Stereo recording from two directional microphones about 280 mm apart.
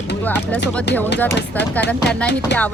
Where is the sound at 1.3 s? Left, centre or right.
Left.